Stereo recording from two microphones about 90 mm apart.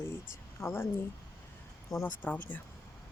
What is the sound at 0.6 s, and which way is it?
Speech, 25° left (ahead or behind).